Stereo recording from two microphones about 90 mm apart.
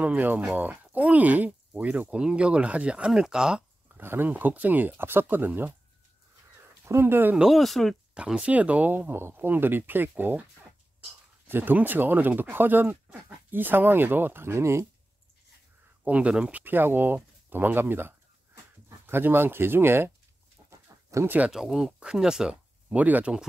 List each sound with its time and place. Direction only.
0.0 s speech: 20° right (ahead or behind)
4.0 s speech: 25° right (ahead or behind)
6.8 s speech: 25° right (ahead or behind)
7.3 s speech: centre (ahead or behind)
8.1 s speech: 10° right (ahead or behind)
11.4 s speech: 20° right (ahead or behind)
16.0 s speech: 15° right (ahead or behind)
16.6 s speech: 25° right (ahead or behind)
21.5 s speech: 5° right (ahead or behind)